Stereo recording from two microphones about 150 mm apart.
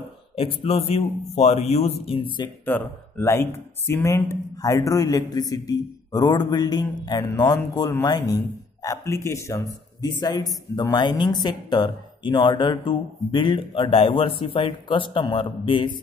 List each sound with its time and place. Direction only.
0.4 s speech: 40° left (ahead or behind)
2.6 s speech: 15° left (ahead or behind); by 16.0 s 35° left (ahead or behind)